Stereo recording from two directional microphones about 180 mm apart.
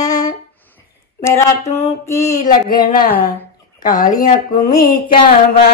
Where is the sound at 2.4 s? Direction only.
50° left (ahead or behind).